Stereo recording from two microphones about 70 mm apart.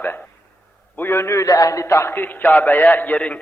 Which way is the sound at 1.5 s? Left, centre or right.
Left.